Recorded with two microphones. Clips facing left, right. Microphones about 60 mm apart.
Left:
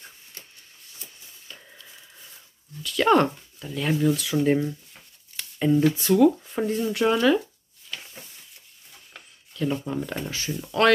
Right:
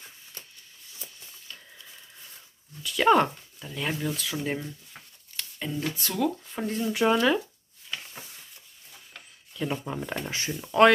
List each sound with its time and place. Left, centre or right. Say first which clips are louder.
1.5 s a sound: left 2 dB; centre
2.8 s speech: left 1 dB; centre
5.3 s shuffling cards: left 12 dB; centre
5.9 s speech: left 8 dB; centre
9.5 s speech: left 4 dB; centre